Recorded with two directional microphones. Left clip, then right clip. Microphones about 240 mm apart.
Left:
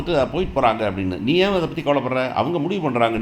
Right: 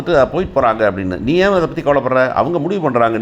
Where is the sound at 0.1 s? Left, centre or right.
Centre.